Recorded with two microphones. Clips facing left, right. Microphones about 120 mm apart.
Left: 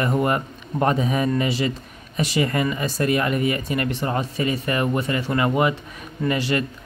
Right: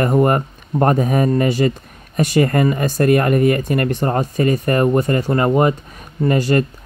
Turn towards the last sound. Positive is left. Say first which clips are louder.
# right 6 dB
turn(degrees=-45)  # may be behind; listen again after turning